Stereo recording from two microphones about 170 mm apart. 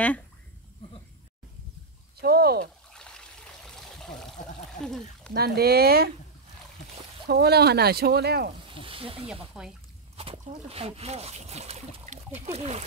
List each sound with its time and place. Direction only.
2.1 s speech: 65° right (ahead or behind)
2.9 s trickle: 5° left (ahead or behind)
4.8 s speech: 5° left (ahead or behind)
5.3 s speech: 65° right (ahead or behind)
7.2 s speech: 70° right (ahead or behind)
8.6 s snake: 30° right (ahead or behind)
9.3 s speech: 5° right (ahead or behind)
10.1 s speech: 35° right (ahead or behind)